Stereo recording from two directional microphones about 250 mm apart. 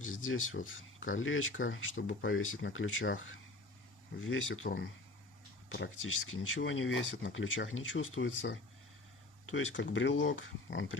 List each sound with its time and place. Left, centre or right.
0.0 s a sound: left
0.7 s speech: left
4.6 s speech: left
5.6 s speech: left